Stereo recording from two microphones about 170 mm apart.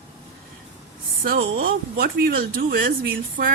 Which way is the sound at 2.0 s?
60° right (ahead or behind).